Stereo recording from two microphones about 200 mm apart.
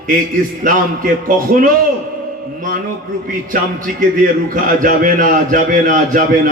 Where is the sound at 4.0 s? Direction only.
40° right (ahead or behind).